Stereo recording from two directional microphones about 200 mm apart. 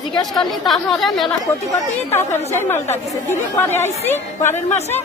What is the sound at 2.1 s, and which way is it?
Speech, 10° left (ahead or behind).